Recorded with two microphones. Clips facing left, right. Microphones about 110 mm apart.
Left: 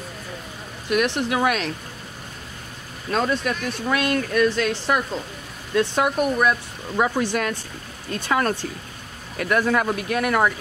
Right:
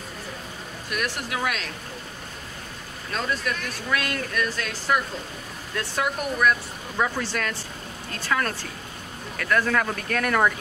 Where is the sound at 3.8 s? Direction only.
25° left (ahead or behind).